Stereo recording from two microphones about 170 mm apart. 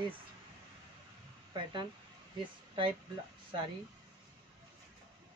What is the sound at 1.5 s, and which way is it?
Speech, 25° right (ahead or behind).